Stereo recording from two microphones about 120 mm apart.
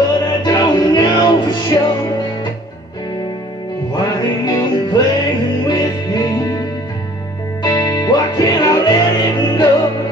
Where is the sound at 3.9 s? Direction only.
35° left (ahead or behind).